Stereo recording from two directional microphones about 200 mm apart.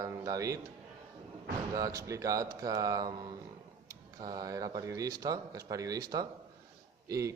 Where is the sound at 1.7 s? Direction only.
15° right (ahead or behind).